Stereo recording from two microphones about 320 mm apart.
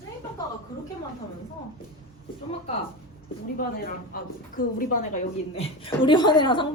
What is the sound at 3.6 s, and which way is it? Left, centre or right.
A woman's voice, left.